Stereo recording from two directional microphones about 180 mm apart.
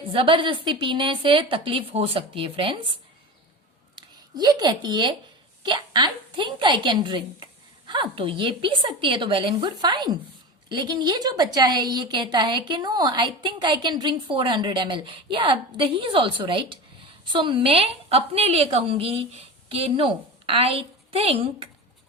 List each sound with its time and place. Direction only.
0.1 s a woman's voice: 30° right (ahead or behind)
3.9 s a woman's voice: 20° right (ahead or behind)